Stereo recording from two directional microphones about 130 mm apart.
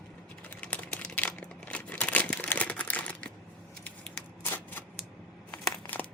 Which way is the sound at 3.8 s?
15° left (ahead or behind).